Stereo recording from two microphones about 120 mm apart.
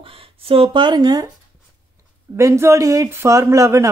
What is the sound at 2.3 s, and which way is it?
Speech, 25° right (ahead or behind).